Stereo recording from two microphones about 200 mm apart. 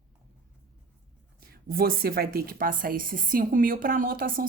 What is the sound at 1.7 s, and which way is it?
Speech, 50° right (ahead or behind).